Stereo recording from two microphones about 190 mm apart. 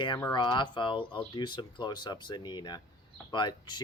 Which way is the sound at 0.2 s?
20° left (ahead or behind).